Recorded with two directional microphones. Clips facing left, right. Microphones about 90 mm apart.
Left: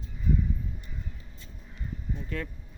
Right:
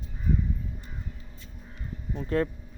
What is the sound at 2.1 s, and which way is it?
Speech, 40° right (ahead or behind).